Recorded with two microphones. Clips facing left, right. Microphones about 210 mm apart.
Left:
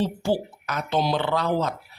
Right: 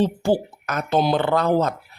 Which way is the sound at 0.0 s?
50° right (ahead or behind).